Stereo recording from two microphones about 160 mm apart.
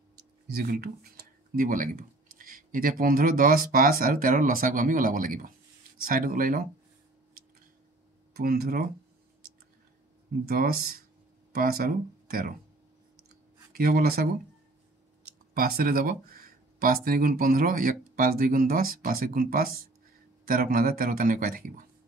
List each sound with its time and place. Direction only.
0.5 s speech: 75° right (ahead or behind)
8.3 s speech: 75° right (ahead or behind)
10.4 s speech: 70° right (ahead or behind)
13.7 s speech: 65° right (ahead or behind)
15.5 s speech: 65° right (ahead or behind)